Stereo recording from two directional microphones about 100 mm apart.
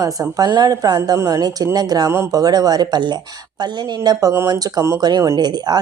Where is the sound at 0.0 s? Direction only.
40° right (ahead or behind).